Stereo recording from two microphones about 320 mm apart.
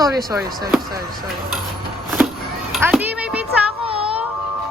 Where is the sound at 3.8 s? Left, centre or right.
Centre.